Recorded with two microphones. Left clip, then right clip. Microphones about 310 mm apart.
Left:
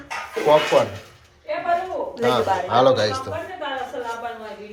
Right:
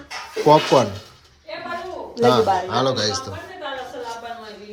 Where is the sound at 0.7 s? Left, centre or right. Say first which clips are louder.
Right 1 dB; centre.